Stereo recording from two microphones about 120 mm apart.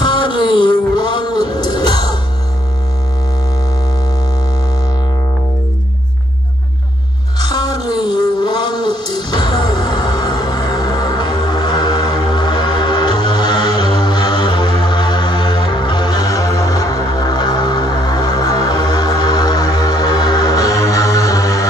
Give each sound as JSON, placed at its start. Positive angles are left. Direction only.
{"t": 0.0, "sound": "music", "side_deg": 40}
{"t": 7.3, "sound": "music", "side_deg": 35}
{"t": 7.9, "sound": "a sound", "side_deg": 35}
{"t": 14.9, "sound": "music", "side_deg": 40}